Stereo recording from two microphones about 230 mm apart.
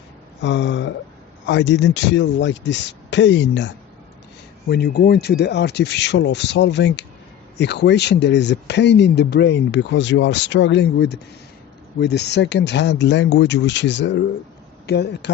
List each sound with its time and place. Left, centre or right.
0.4 s speech: left